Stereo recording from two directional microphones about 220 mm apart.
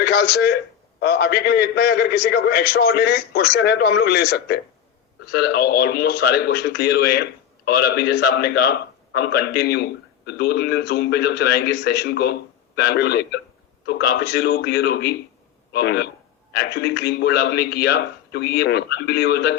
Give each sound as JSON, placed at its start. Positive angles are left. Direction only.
{"t": 0.0, "sound": "a man's voice", "side_deg": 45}